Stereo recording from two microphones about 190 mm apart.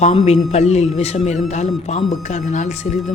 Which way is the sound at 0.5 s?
35° left (ahead or behind).